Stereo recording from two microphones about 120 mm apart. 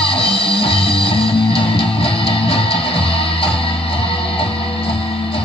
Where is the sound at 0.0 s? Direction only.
50° left (ahead or behind).